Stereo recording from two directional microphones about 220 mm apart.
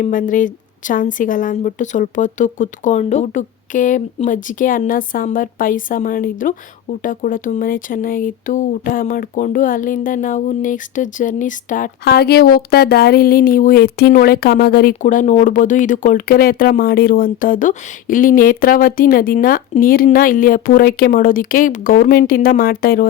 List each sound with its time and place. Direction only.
0.0 s a woman's voice: 35° left (ahead or behind)